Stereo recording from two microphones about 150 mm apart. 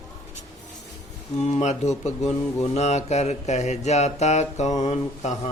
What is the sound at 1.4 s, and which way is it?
Mantra, 50° left (ahead or behind).